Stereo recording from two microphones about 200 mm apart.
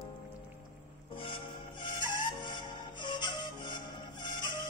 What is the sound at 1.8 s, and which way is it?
Music, 25° left (ahead or behind).